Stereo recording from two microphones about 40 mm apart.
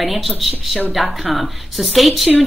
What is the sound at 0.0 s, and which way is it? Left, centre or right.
A woman's voice, centre.